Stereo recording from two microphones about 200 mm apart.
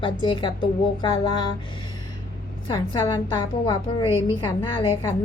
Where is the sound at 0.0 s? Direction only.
25° left (ahead or behind).